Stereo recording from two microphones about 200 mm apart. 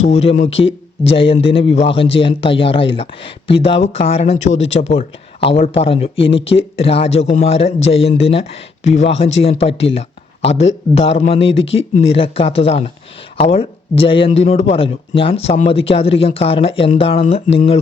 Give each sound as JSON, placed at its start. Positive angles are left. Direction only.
{"t": 0.0, "sound": "a man's voice", "side_deg": 30}